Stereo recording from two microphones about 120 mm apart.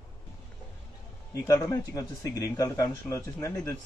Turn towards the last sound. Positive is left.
turn(degrees=25)  # may be behind; listen again after turning